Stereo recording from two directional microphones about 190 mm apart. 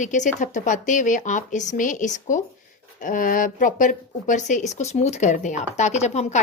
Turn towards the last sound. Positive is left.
turn(degrees=35)  # may be behind; listen again after turning